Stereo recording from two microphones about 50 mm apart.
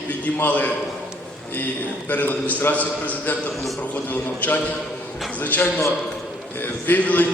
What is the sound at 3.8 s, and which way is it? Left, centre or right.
A man's voice, left.